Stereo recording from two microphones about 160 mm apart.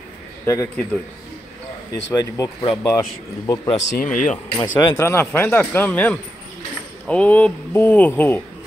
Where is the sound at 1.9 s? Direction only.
25° left (ahead or behind).